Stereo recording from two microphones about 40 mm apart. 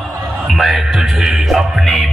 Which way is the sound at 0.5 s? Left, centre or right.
Centre.